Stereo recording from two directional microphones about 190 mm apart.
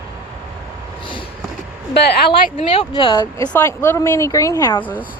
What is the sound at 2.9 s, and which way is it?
Speech, 25° left (ahead or behind).